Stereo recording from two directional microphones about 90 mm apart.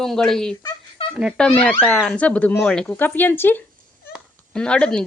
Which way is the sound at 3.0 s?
20° left (ahead or behind).